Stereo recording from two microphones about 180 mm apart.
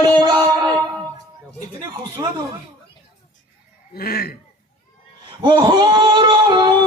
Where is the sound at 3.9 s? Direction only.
60° left (ahead or behind).